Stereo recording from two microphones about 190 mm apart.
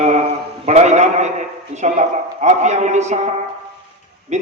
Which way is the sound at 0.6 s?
35° right (ahead or behind).